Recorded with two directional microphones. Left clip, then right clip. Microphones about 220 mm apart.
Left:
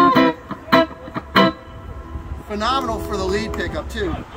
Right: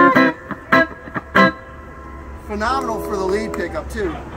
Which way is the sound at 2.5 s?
Centre (ahead or behind).